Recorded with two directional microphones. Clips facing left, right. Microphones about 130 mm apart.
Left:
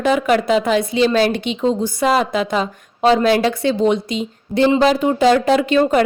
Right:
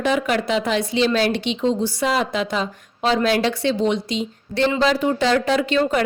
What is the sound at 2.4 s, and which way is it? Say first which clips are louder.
A woman's voice: left 4 dB; 50° left (ahead or behind).